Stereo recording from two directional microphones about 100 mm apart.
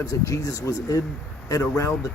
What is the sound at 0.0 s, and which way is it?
Speech, 30° left (ahead or behind).